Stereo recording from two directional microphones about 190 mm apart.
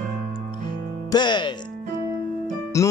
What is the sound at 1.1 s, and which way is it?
Speech, 25° left (ahead or behind).